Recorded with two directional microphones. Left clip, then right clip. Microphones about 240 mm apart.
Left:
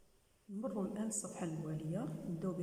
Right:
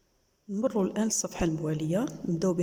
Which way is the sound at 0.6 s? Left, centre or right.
Right.